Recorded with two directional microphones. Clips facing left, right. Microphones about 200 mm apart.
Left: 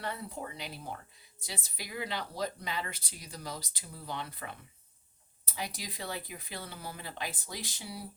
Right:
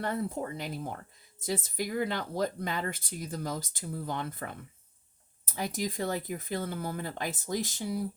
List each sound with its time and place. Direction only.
0.0 s speech: 50° right (ahead or behind)